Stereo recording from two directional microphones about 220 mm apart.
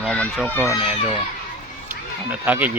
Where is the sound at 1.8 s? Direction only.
10° right (ahead or behind).